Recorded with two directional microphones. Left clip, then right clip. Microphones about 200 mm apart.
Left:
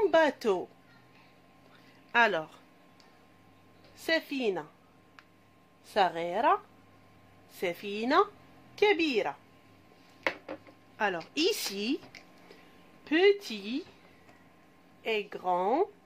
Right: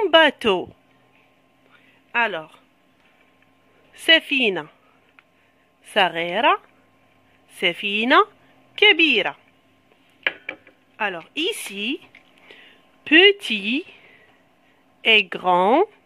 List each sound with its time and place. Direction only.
0.0 s speech: 45° right (ahead or behind)
2.1 s speech: 15° right (ahead or behind)
4.0 s speech: 40° right (ahead or behind)
5.9 s speech: 40° right (ahead or behind)
7.6 s speech: 45° right (ahead or behind)
11.0 s a woman's voice: 20° right (ahead or behind)
13.0 s speech: 50° right (ahead or behind)
15.0 s speech: 50° right (ahead or behind)